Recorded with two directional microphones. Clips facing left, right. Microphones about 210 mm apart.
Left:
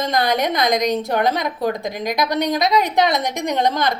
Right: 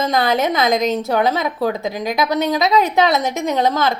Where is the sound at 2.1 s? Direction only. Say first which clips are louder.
Right 2 dB; 15° left (ahead or behind).